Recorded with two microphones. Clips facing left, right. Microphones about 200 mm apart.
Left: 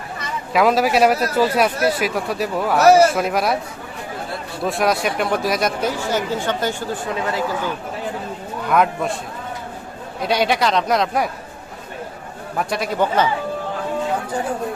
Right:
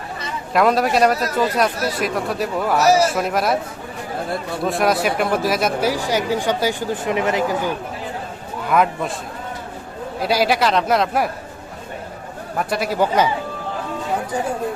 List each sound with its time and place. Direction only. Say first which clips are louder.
0.5 s speech: even; centre (ahead or behind)
2.8 s speech: left 5 dB; 55° left (ahead or behind)
3.2 s speech: even; centre (ahead or behind)
4.6 s a woman's voice: even; centre (ahead or behind); by 7.5 s 20° right (ahead or behind)
8.7 s speech: even; centre (ahead or behind)
10.2 s speech: right 1 dB; 5° right (ahead or behind)
12.5 s speech: right 1 dB; centre (ahead or behind)